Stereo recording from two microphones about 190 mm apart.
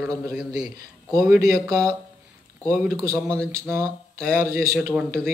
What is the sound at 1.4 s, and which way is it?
Speech, 15° right (ahead or behind).